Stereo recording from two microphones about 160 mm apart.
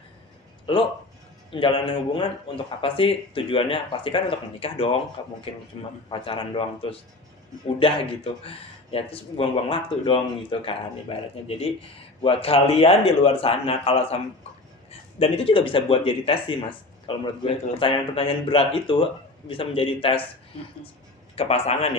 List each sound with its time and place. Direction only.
0.7 s speech: 30° left (ahead or behind)
21.4 s speech: 40° left (ahead or behind)